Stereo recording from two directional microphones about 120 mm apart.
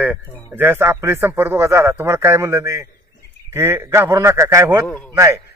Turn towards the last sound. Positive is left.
turn(degrees=-20)  # may be behind; listen again after turning